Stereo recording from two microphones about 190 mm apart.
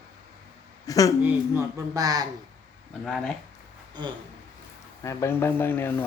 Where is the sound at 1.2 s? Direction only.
10° right (ahead or behind).